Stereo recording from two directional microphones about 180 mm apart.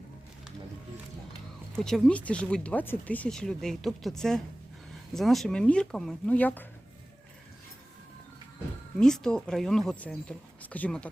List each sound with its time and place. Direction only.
1.7 s speech: 5° left (ahead or behind)
9.0 s speech: 5° left (ahead or behind)